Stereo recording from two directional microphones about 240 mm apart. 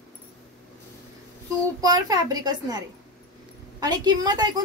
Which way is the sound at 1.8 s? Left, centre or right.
Centre.